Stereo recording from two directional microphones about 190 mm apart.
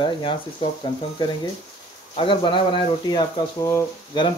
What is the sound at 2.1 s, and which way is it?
Speech, 25° left (ahead or behind).